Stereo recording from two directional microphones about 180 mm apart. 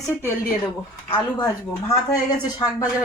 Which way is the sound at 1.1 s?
20° left (ahead or behind).